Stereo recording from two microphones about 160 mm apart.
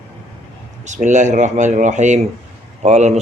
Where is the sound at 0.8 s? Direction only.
50° right (ahead or behind).